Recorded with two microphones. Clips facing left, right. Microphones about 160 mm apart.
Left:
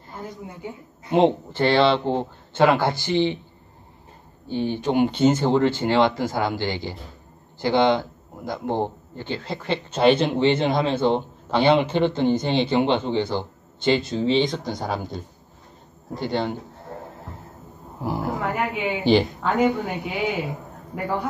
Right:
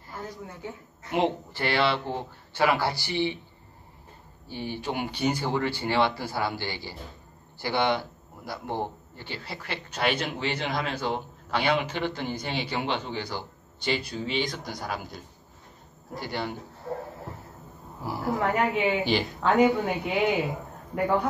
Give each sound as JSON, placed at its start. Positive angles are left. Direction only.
{"t": 0.1, "sound": "a woman's voice", "side_deg": 20}
{"t": 1.1, "sound": "a man's voice", "side_deg": 25}
{"t": 4.5, "sound": "a man's voice", "side_deg": 20}
{"t": 16.2, "sound": "a man's voice", "side_deg": 25}
{"t": 18.0, "sound": "a man's voice", "side_deg": 20}
{"t": 18.4, "sound": "a woman's voice", "side_deg": 0}